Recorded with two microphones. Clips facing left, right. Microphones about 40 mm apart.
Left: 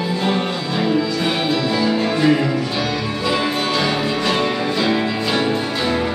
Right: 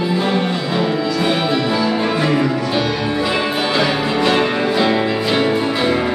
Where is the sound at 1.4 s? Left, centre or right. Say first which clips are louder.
Right 1 dB; centre.